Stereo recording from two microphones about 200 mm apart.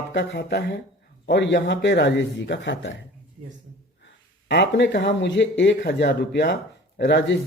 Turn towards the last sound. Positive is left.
turn(degrees=65)  # may be behind; listen again after turning